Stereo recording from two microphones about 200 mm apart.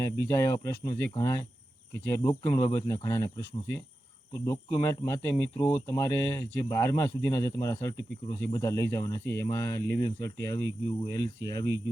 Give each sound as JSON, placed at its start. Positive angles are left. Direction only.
{"t": 0.0, "sound": "speech", "side_deg": 15}
{"t": 4.4, "sound": "speech", "side_deg": 20}